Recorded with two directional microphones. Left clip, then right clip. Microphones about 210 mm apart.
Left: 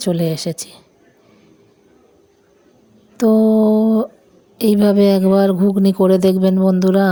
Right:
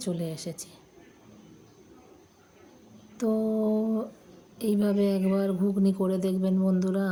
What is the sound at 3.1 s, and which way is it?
Speech, 40° left (ahead or behind).